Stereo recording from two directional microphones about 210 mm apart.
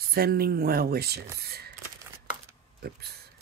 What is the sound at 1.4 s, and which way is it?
Shuffling cards, 45° right (ahead or behind).